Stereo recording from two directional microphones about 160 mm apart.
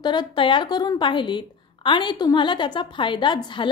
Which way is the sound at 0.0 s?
30° left (ahead or behind).